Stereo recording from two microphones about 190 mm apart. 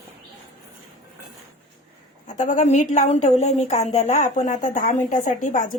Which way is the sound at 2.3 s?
40° left (ahead or behind).